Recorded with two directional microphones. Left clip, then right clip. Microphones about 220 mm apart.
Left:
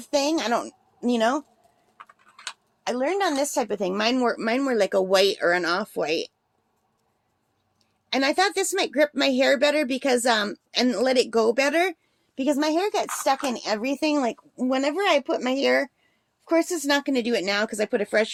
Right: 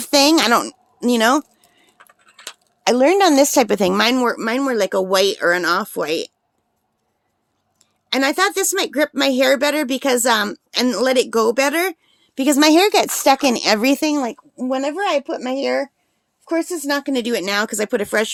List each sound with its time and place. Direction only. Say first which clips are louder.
0.0 s a woman's voice: right 10 dB; 45° right (ahead or behind)
2.8 s speech: right 11 dB; 50° right (ahead or behind); by 6.3 s 25° right (ahead or behind)
7.8 s speech: right 5 dB; 30° right (ahead or behind); by 14.0 s 50° right (ahead or behind)
14.0 s speech: right 3 dB; 25° right (ahead or behind)